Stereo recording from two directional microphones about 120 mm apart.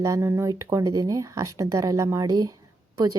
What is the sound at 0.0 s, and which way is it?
A woman's voice, 25° right (ahead or behind).